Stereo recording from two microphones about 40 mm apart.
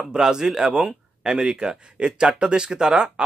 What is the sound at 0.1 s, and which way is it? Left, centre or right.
Speech, centre.